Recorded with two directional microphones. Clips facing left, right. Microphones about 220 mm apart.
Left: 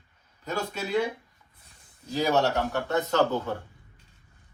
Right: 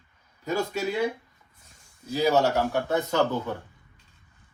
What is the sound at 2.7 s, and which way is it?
Speech, 10° right (ahead or behind).